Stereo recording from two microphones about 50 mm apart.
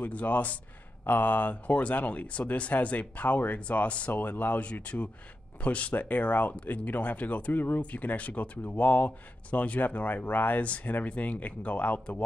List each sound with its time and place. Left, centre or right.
0.0 s speech: left
4.1 s speech: left